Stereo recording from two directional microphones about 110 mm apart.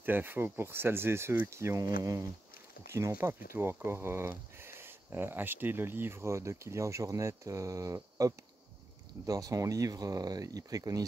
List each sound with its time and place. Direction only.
0.0 s speech: 20° right (ahead or behind)